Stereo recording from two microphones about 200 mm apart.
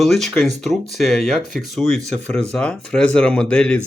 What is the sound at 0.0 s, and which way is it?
Speech, centre (ahead or behind).